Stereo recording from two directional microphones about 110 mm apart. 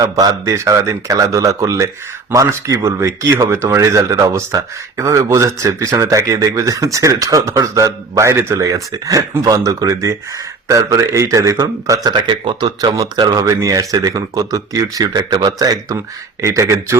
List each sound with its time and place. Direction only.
0.0 s speech: 35° right (ahead or behind)
12.0 s speech: 45° right (ahead or behind); by 17.0 s 25° right (ahead or behind)